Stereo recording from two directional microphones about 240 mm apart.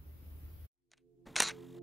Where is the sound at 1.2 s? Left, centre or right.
Centre.